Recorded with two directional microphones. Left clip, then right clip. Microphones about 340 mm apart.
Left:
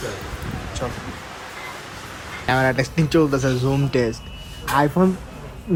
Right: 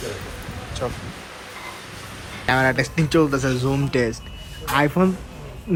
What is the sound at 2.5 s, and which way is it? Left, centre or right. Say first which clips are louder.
Speech: even; centre.